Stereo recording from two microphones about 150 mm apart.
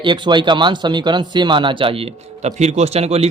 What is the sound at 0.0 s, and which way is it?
Speech, 30° right (ahead or behind).